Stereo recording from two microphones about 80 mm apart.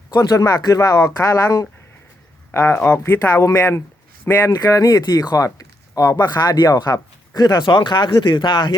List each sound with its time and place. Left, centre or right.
0.1 s speech: left
2.5 s speech: left
3.2 s speech: left
4.4 s speech: left